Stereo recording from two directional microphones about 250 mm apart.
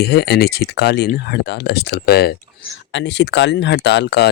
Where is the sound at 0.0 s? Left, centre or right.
Left.